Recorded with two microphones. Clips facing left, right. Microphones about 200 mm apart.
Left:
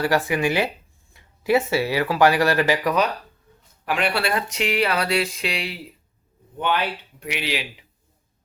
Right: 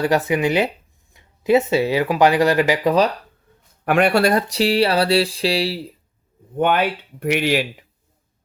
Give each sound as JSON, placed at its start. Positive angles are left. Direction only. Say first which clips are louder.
{"t": 0.0, "sound": "speech", "louder": "right 3 dB", "side_deg": -20}
{"t": 3.8, "sound": "speech", "louder": "right 8 dB", "side_deg": -50}
{"t": 6.6, "sound": "speech", "louder": "right 6 dB", "side_deg": -50}